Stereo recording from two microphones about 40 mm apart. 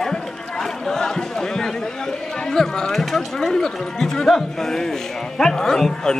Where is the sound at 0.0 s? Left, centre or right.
Centre.